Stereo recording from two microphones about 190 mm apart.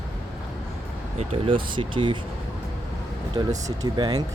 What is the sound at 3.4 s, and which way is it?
Speech, 25° right (ahead or behind).